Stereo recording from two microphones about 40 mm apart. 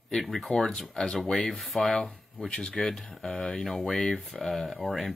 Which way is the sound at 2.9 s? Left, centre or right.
Centre.